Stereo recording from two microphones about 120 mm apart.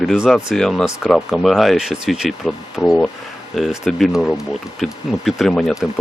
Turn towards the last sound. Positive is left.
turn(degrees=0)  # may be behind; listen again after turning